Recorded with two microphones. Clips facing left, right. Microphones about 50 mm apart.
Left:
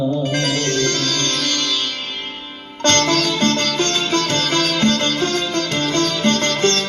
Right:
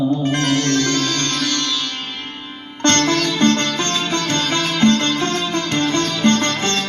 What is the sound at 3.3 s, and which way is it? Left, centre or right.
Music, right.